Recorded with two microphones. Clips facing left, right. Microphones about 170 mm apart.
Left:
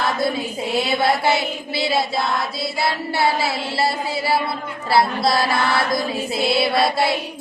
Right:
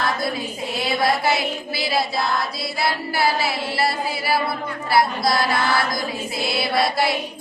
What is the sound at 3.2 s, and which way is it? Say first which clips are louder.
Chant: left 1 dB; 25° left (ahead or behind).